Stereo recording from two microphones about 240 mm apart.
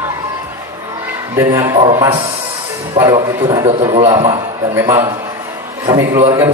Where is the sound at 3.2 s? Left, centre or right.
Right.